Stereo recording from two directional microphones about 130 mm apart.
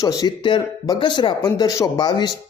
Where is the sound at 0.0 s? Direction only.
30° left (ahead or behind).